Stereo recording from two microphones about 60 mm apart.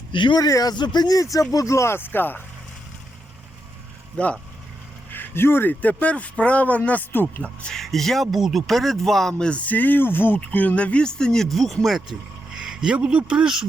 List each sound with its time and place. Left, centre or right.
0.3 s speech: left
1.5 s speech: left
4.2 s speech: left
5.1 s speech: left
5.8 s speech: left
7.4 s speech: centre
7.8 s speech: centre
9.5 s speech: left; by 12.0 s centre
12.7 s speech: centre